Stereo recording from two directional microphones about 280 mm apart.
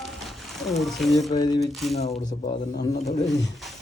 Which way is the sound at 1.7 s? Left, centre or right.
Centre.